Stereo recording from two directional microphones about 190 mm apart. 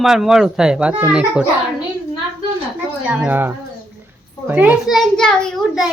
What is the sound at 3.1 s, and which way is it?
Speech, 10° right (ahead or behind).